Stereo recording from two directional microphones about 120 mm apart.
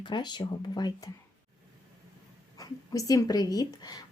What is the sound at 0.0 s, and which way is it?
Speech, 40° left (ahead or behind).